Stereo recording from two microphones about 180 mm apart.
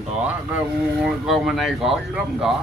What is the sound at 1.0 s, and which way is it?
Speech, centre (ahead or behind).